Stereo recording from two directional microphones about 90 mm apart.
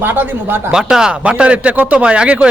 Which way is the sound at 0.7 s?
5° right (ahead or behind).